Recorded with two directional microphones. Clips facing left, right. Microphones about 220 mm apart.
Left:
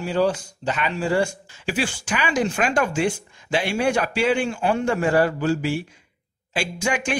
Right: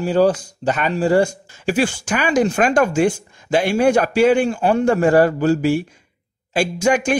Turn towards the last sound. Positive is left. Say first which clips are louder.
# right 8 dB
turn(degrees=-40)  # may be behind; listen again after turning